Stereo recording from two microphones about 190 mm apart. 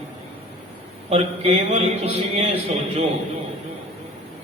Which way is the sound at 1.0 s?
30° right (ahead or behind).